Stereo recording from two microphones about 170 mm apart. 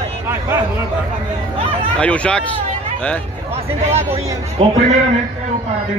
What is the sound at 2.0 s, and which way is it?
Speech, 5° left (ahead or behind).